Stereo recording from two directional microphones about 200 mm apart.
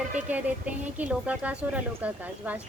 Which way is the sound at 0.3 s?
5° right (ahead or behind).